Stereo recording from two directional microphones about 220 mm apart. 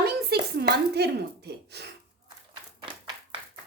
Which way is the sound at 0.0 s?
45° right (ahead or behind).